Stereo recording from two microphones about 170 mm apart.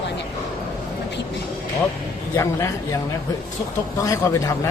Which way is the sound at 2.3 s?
20° left (ahead or behind).